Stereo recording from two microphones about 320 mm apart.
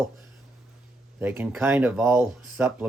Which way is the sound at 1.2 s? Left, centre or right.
Centre.